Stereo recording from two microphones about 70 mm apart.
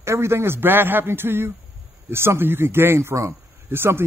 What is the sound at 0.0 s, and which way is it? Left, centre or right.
A man's voice, right.